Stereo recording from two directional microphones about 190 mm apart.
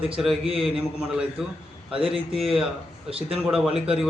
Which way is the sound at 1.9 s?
30° right (ahead or behind).